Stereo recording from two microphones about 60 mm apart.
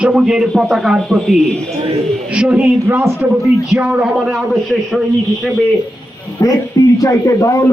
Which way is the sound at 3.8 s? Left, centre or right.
Right.